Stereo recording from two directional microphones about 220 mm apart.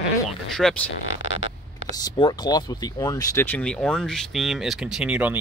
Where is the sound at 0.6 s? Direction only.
Centre (ahead or behind).